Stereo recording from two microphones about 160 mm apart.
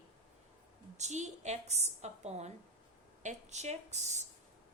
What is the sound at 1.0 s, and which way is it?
A woman's voice, 45° right (ahead or behind).